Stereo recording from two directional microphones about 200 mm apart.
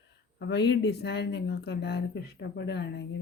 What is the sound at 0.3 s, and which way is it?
Speech, 55° left (ahead or behind).